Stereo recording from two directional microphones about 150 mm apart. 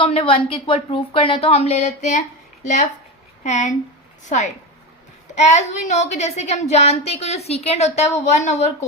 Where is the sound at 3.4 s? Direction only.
55° left (ahead or behind).